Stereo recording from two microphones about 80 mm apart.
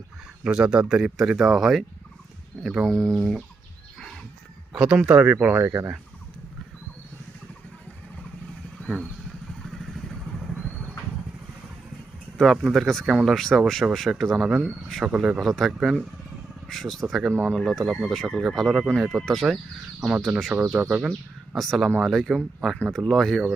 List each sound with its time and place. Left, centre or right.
0.4 s speech: centre
4.7 s speech: centre
5.5 s speech: right
8.8 s vehicle: centre
12.4 s speech: centre
15.0 s speech: centre
15.4 s speech: centre
20.0 s speech: centre
20.4 s speech: centre
21.1 s speech: centre